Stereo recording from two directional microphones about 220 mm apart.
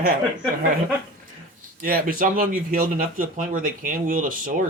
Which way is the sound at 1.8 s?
40° right (ahead or behind).